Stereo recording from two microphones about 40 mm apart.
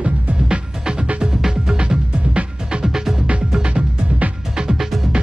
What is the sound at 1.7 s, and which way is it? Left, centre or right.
Music, right.